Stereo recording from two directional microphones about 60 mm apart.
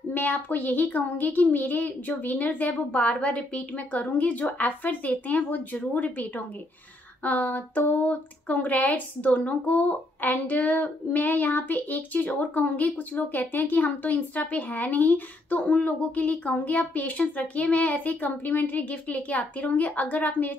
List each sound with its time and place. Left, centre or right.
0.1 s speech: left